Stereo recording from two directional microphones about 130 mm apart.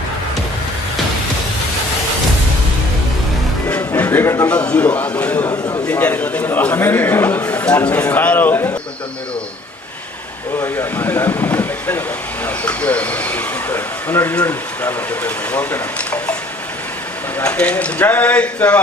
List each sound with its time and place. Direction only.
3.8 s music: 15° left (ahead or behind)
4.4 s speech: 10° left (ahead or behind)
5.5 s a man's voice: 25° left (ahead or behind)
5.9 s speech: 10° left (ahead or behind)
10.6 s speech: 20° left (ahead or behind)